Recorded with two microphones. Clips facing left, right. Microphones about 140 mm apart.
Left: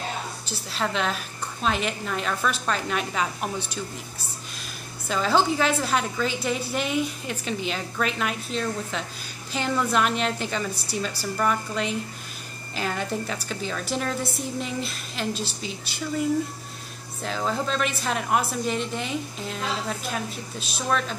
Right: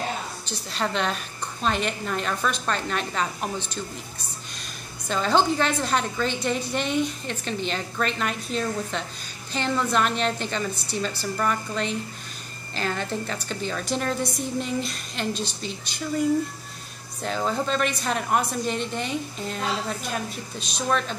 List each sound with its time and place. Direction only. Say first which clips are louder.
0.5 s a woman's voice: right 1 dB; centre (ahead or behind)
5.0 s a woman's voice: even; 5° left (ahead or behind)
17.2 s a woman's voice: right 1 dB; centre (ahead or behind)